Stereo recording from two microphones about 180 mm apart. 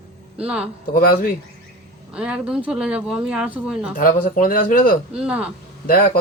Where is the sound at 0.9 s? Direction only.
55° left (ahead or behind).